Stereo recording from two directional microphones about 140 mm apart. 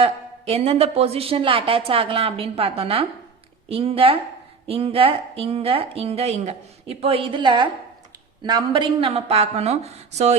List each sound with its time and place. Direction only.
0.0 s a woman's voice: 45° right (ahead or behind)